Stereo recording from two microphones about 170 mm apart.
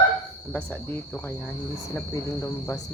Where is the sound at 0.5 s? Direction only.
10° left (ahead or behind).